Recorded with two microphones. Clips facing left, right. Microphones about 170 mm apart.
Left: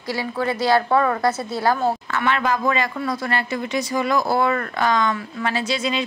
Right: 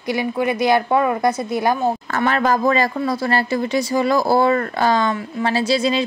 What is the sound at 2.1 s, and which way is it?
A woman's voice, 40° right (ahead or behind).